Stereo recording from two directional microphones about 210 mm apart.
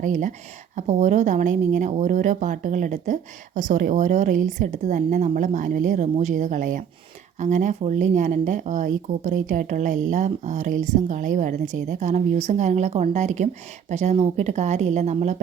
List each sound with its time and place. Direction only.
0.0 s speech: 35° right (ahead or behind)